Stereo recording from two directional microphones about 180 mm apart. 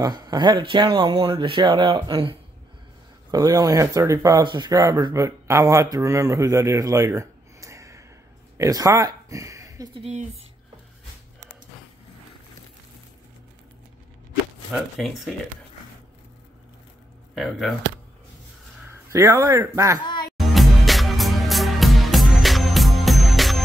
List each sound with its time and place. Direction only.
0.0 s speech: 20° right (ahead or behind)
9.9 s speech: 35° right (ahead or behind)
14.7 s speech: centre (ahead or behind)
17.4 s speech: centre (ahead or behind)
18.9 s speech: 15° right (ahead or behind)
20.0 s speech: 25° left (ahead or behind)
20.3 s music: centre (ahead or behind)